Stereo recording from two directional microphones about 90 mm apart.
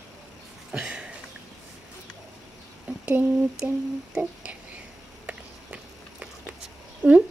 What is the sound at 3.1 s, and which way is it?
Humming, 20° right (ahead or behind).